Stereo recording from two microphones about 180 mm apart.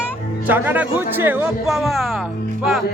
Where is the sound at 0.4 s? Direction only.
10° right (ahead or behind).